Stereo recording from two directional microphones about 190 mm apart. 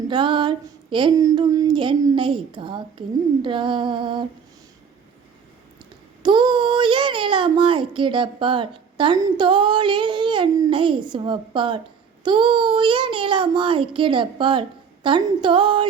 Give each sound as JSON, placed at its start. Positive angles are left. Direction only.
{"t": 0.1, "sound": "speech", "side_deg": -25}
{"t": 6.2, "sound": "speech", "side_deg": -25}